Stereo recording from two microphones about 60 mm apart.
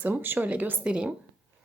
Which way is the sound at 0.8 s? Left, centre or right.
Centre.